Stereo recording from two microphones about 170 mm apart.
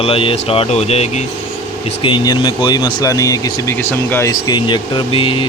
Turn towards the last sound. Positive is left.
turn(degrees=30)  # may be behind; listen again after turning